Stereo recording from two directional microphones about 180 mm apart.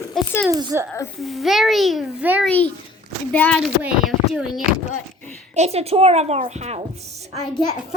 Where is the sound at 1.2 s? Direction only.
Centre (ahead or behind).